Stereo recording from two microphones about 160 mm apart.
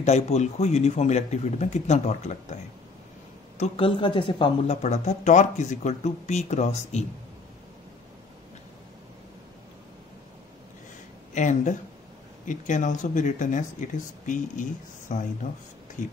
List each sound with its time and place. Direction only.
0.0 s speech: 45° left (ahead or behind)
11.3 s speech: 50° left (ahead or behind)